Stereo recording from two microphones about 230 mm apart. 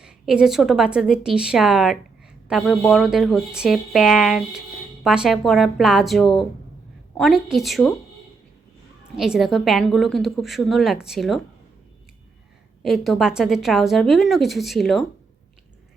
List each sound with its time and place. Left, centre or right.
0.0 s a woman's voice: centre
9.1 s a woman's voice: centre
12.8 s a woman's voice: centre